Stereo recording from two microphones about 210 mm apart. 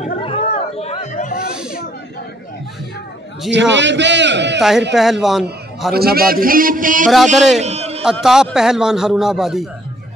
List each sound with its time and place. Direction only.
0.0 s chatter: 25° left (ahead or behind); by 1.5 s 40° left (ahead or behind)
3.4 s a man's voice: 60° right (ahead or behind)
4.6 s a man's voice: centre (ahead or behind)
5.9 s a man's voice: 45° right (ahead or behind)
7.3 s a man's voice: centre (ahead or behind)
7.6 s a sound: 30° right (ahead or behind)
8.0 s a man's voice: centre (ahead or behind)